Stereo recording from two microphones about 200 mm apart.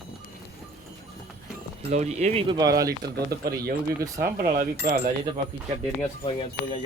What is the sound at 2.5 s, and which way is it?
Speech, 20° right (ahead or behind).